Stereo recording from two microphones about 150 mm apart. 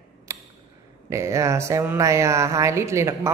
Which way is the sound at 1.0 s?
20° right (ahead or behind).